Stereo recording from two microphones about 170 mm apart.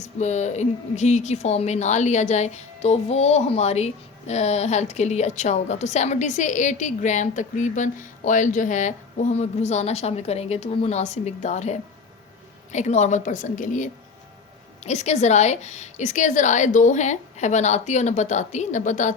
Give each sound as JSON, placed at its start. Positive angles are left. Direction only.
{"t": 0.0, "sound": "a woman's voice", "side_deg": 45}